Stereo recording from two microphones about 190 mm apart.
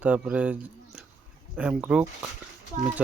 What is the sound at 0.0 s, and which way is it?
Speech, 5° right (ahead or behind).